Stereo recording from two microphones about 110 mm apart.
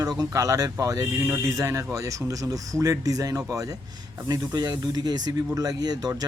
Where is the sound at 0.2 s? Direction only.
30° right (ahead or behind).